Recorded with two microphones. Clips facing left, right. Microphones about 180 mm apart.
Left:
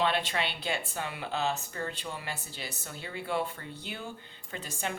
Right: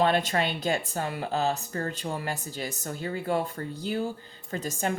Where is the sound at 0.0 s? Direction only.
45° right (ahead or behind).